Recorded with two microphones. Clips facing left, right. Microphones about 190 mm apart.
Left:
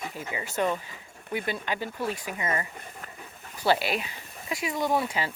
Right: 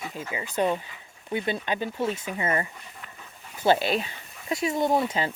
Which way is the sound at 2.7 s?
50° left (ahead or behind).